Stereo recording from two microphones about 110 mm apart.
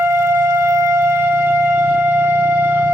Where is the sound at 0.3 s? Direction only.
25° right (ahead or behind).